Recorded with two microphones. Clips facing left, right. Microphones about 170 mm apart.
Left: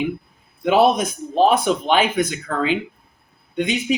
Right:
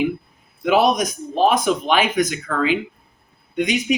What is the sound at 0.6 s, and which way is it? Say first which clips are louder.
Speech: left 1 dB; 25° left (ahead or behind).